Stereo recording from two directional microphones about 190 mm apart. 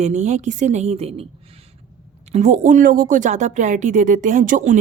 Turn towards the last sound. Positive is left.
turn(degrees=-40)  # may be behind; listen again after turning